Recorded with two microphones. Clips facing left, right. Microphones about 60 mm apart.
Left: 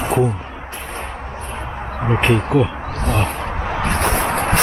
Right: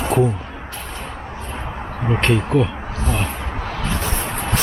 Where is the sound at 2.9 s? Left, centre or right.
Left.